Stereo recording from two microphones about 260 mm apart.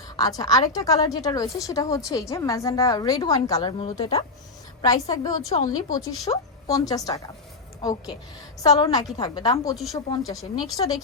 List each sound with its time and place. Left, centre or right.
0.2 s a woman's voice: centre
8.6 s a woman's voice: centre